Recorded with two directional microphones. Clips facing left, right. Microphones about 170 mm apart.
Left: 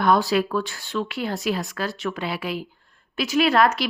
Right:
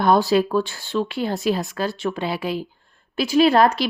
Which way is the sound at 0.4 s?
30° right (ahead or behind).